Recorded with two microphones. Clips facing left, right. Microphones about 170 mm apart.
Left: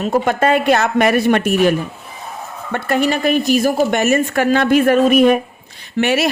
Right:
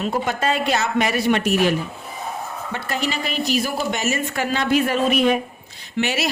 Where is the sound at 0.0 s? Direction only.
50° left (ahead or behind).